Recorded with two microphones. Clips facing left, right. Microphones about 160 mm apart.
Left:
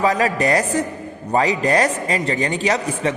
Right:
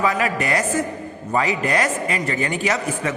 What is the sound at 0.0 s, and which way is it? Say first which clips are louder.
A man's voice: left 3 dB; 35° left (ahead or behind).